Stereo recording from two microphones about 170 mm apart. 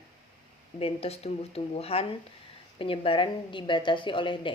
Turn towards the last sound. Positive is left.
turn(degrees=30)  # may be behind; listen again after turning